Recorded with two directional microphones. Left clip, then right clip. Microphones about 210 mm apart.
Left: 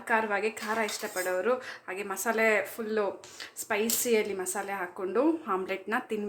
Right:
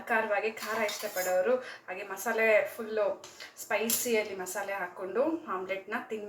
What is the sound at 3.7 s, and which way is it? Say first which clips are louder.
Speech: left 1 dB; 60° left (ahead or behind).